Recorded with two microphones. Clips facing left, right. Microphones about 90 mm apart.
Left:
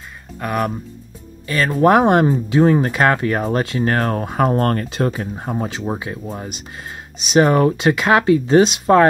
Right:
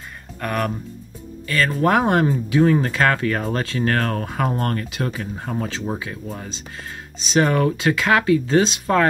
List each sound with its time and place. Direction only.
0.4 s speech: 10° left (ahead or behind)